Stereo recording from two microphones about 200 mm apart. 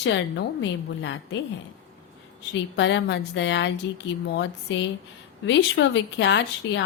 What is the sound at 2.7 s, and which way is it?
A woman's voice, 65° left (ahead or behind).